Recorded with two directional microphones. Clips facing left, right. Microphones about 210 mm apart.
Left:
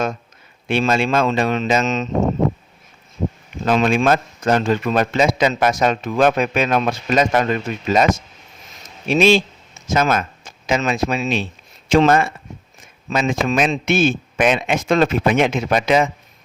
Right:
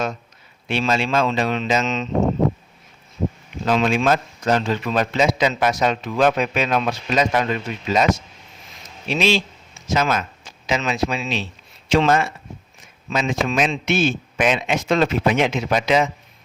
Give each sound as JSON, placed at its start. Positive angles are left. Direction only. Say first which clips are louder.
{"t": 0.7, "sound": "a man's voice", "louder": "left 3 dB", "side_deg": 50}
{"t": 3.7, "sound": "a man's voice", "louder": "left 2 dB", "side_deg": 50}